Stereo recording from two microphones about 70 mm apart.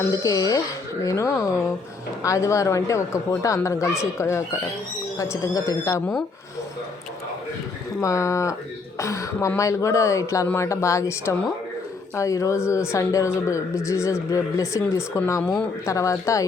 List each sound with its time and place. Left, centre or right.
0.1 s a woman's voice: left
8.0 s a woman's voice: left